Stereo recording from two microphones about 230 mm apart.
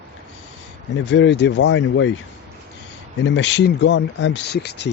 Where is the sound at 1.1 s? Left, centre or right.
Left.